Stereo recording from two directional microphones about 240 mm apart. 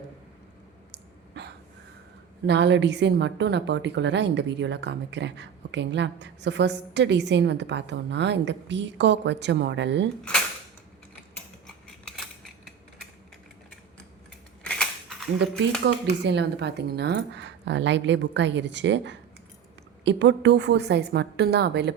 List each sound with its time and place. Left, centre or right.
1.4 s a sound: right
2.5 s a woman's voice: right
14.6 s scissors: centre
15.9 s a woman's voice: right